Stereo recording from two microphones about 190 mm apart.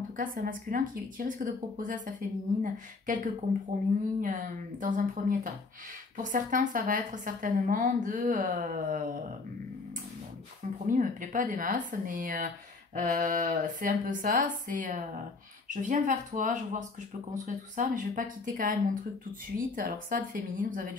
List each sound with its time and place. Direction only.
0.2 s speech: 45° right (ahead or behind)
4.2 s speech: 45° right (ahead or behind)
10.9 s speech: 45° right (ahead or behind)